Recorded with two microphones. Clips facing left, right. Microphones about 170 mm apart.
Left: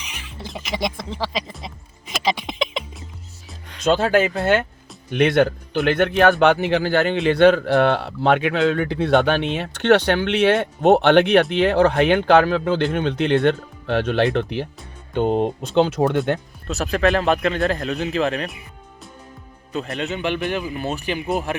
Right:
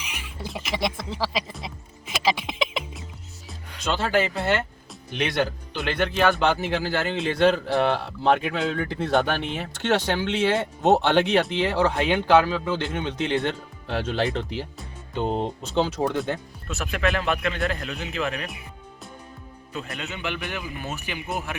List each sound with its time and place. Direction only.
0.0 s music: 5° right (ahead or behind)
4.1 s a man's voice: 55° left (ahead or behind); by 16.4 s 70° left (ahead or behind)
16.6 s speech: 35° left (ahead or behind)
19.7 s speech: 35° left (ahead or behind)